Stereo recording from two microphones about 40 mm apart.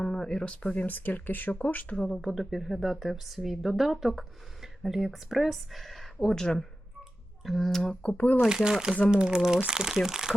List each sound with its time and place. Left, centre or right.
0.0 s speech: centre
0.5 s speech: left
0.9 s speech: left
2.0 s speech: centre
7.4 s speech: centre
8.0 s speech: left
8.4 s speech: centre